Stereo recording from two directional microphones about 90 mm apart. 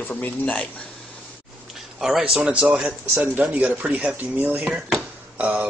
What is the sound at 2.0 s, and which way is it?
Speech, 5° right (ahead or behind).